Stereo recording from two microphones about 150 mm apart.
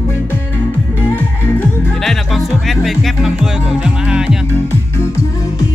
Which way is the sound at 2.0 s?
Centre (ahead or behind).